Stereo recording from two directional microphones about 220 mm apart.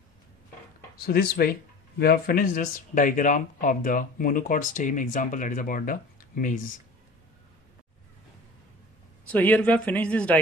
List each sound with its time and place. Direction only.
0.9 s speech: 45° left (ahead or behind)
9.3 s speech: 5° left (ahead or behind)